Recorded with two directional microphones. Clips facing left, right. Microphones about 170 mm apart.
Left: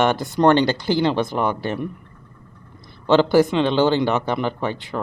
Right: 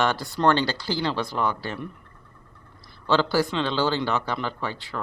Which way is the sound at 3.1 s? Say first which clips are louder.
Left 7 dB; 20° left (ahead or behind).